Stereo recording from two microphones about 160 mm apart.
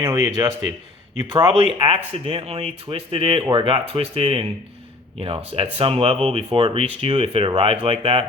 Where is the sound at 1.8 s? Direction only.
40° right (ahead or behind).